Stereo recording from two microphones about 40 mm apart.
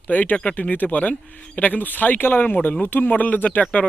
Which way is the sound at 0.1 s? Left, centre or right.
Left.